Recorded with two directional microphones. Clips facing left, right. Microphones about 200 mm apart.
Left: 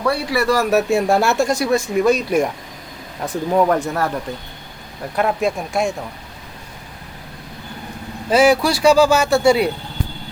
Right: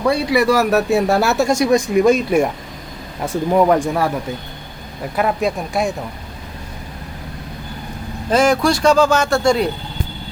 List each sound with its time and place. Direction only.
0.0 s speech: 20° right (ahead or behind); by 1.5 s centre (ahead or behind)
1.5 s speech: 15° right (ahead or behind)
3.2 s speech: 10° right (ahead or behind)
5.1 s speech: centre (ahead or behind)
8.3 s speech: 10° left (ahead or behind)